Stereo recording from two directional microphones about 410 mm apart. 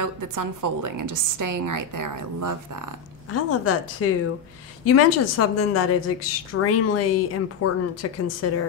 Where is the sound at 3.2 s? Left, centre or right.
Left.